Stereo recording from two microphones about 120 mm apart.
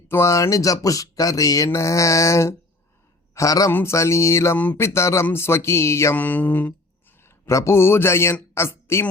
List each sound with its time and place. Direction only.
0.1 s a man's voice: 25° left (ahead or behind)